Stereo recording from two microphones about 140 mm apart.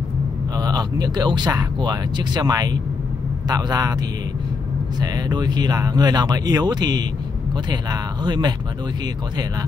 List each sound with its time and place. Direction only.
0.6 s speech: 30° right (ahead or behind)
5.0 s speech: 30° right (ahead or behind)